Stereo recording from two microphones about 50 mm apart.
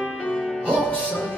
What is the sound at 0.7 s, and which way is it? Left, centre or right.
Music, left.